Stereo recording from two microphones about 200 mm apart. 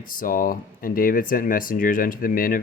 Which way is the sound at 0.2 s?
45° left (ahead or behind).